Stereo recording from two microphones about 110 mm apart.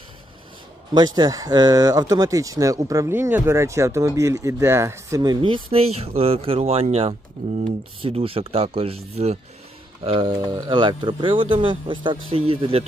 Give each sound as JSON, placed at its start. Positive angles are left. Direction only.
{"t": 0.9, "sound": "speech", "side_deg": -40}
{"t": 5.4, "sound": "speech", "side_deg": -60}
{"t": 10.0, "sound": "speech", "side_deg": -55}